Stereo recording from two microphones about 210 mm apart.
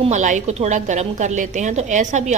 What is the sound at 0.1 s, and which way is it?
A woman's voice, 35° right (ahead or behind).